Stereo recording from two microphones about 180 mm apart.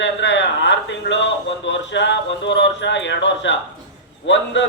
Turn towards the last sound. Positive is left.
turn(degrees=90)